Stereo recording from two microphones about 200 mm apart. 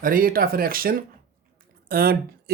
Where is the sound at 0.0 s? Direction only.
45° right (ahead or behind).